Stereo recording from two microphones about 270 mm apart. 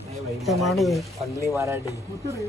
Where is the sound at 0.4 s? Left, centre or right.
Centre.